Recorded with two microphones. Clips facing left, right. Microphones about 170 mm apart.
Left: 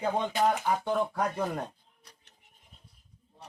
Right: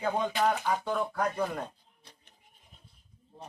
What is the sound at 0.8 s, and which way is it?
Speech, 25° left (ahead or behind).